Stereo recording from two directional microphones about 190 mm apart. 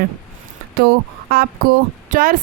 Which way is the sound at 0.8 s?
55° right (ahead or behind).